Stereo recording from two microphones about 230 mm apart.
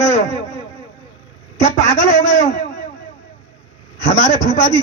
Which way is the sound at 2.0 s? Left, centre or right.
Left.